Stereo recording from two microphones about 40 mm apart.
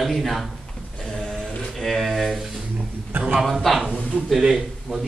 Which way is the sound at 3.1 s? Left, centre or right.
Right.